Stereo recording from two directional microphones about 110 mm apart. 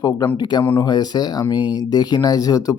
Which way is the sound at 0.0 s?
30° left (ahead or behind).